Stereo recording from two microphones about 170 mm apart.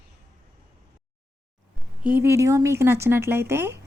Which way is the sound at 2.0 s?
10° right (ahead or behind).